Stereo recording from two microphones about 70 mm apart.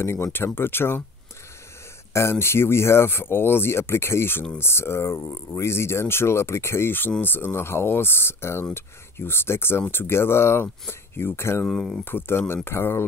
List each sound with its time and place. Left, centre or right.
0.0 s speech: left
2.1 s speech: left
11.6 s speech: centre
12.0 s speech: left